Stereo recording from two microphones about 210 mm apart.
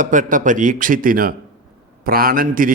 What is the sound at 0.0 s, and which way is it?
Speech, 40° right (ahead or behind).